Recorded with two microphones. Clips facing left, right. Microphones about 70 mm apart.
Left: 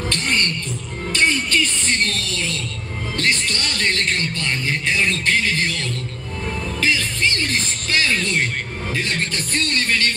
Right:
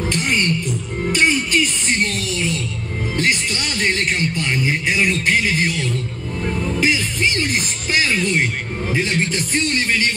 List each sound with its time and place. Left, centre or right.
0.1 s music: centre
3.2 s a man's voice: centre